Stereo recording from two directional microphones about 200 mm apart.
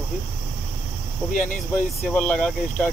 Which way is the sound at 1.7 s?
5° left (ahead or behind).